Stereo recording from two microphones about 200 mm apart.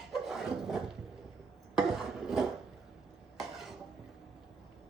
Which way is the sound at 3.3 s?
Centre (ahead or behind).